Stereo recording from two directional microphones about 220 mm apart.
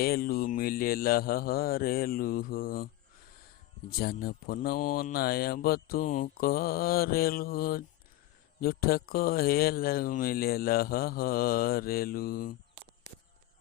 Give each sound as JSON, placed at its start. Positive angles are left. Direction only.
{"t": 0.0, "sound": "mantra", "side_deg": 45}